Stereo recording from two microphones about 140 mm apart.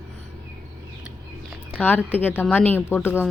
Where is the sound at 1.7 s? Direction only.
10° left (ahead or behind).